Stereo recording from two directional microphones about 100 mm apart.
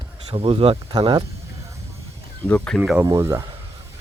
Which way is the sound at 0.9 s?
45° right (ahead or behind).